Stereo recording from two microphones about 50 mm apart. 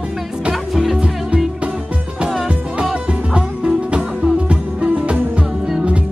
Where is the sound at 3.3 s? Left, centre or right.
Centre.